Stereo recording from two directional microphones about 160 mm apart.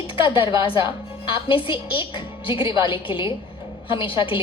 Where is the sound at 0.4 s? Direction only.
30° left (ahead or behind).